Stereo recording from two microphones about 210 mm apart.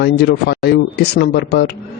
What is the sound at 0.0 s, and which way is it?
Speech, 50° left (ahead or behind).